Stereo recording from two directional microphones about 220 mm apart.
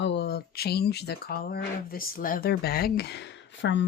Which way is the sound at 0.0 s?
50° left (ahead or behind).